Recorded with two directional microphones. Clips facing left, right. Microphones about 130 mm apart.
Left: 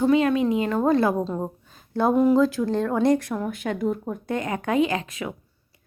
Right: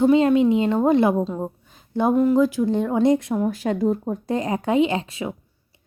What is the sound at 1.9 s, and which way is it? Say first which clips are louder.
A woman's voice: right 1 dB; 15° right (ahead or behind).